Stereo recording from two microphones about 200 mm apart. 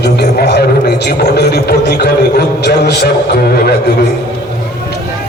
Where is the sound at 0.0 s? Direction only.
55° left (ahead or behind).